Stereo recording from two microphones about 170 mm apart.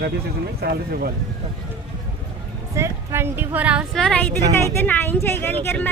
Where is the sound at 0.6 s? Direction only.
65° right (ahead or behind).